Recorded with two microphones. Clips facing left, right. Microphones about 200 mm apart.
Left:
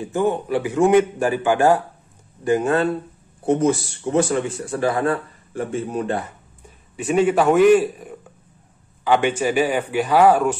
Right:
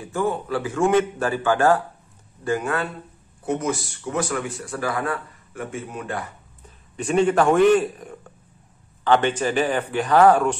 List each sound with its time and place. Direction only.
0.0 s speech: 20° left (ahead or behind)
7.0 s speech: 5° left (ahead or behind)